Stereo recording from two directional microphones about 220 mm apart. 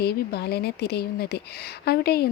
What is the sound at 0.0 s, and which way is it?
Speech, 45° left (ahead or behind).